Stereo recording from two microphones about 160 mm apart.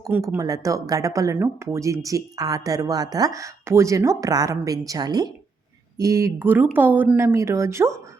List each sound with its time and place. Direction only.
0.0 s speech: 15° right (ahead or behind)